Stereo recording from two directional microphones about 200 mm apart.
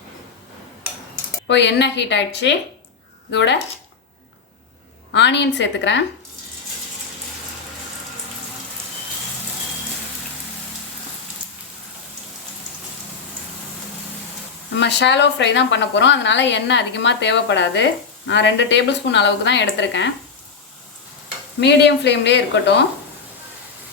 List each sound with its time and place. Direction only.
1.5 s a woman's voice: 60° left (ahead or behind)
5.1 s a woman's voice: 60° left (ahead or behind)
14.8 s a woman's voice: 60° left (ahead or behind)
21.6 s a woman's voice: 60° left (ahead or behind)